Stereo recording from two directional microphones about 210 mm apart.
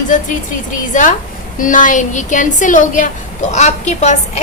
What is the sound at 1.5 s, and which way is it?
A woman's voice, 40° left (ahead or behind).